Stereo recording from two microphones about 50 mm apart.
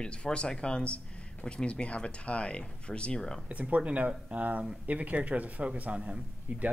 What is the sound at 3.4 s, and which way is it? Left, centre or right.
A man's voice, right.